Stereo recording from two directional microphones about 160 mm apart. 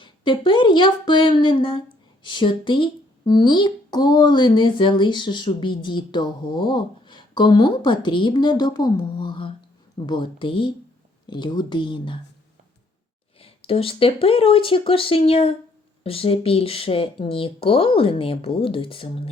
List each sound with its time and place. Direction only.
0.0 s speech: 30° left (ahead or behind)
13.4 s speech: 35° left (ahead or behind)